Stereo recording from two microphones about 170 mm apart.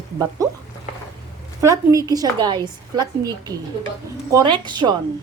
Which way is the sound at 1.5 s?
20° right (ahead or behind).